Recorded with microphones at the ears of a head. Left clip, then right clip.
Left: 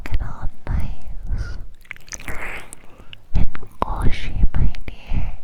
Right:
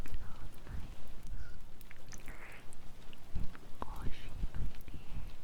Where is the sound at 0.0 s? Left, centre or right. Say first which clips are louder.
Left 18 dB; left.